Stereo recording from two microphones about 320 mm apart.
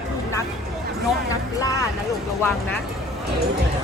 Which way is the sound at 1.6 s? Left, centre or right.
Centre.